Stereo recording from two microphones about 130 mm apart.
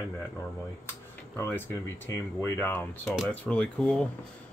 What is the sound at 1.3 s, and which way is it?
Speech, 20° left (ahead or behind).